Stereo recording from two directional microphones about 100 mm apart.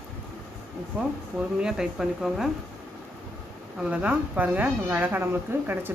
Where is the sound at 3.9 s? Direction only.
15° right (ahead or behind).